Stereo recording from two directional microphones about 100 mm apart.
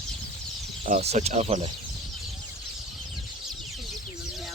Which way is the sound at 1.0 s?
90° right.